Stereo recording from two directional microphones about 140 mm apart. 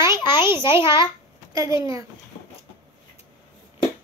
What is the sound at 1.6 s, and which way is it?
Speech, 25° right (ahead or behind).